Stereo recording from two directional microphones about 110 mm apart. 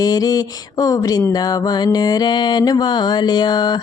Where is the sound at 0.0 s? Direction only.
35° left (ahead or behind).